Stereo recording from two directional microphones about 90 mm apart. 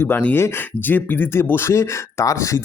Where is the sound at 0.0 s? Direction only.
20° left (ahead or behind).